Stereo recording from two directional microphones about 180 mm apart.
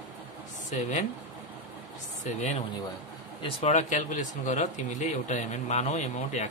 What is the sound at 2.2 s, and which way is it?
Speech, 40° left (ahead or behind).